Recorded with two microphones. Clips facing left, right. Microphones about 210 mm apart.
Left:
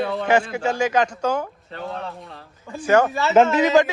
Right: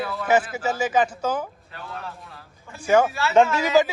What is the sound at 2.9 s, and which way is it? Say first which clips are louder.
Speech: left 2 dB; 10° right (ahead or behind).